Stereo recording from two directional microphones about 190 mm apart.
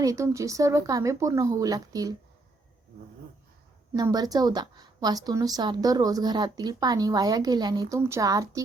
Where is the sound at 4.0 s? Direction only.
20° right (ahead or behind).